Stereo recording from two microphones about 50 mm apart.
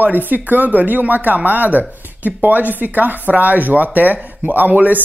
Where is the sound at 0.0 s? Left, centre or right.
Right.